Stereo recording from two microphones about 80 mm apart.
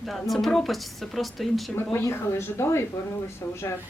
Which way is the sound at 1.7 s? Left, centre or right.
Left.